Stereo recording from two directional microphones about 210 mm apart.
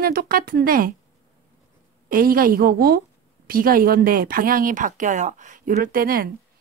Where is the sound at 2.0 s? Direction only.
45° right (ahead or behind).